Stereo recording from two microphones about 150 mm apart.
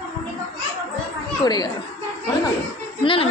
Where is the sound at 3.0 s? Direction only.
40° left (ahead or behind).